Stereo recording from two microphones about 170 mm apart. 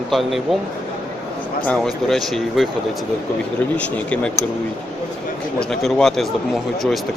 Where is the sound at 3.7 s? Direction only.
10° left (ahead or behind).